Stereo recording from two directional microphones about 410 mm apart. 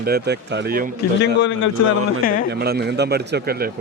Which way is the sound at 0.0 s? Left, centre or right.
Right.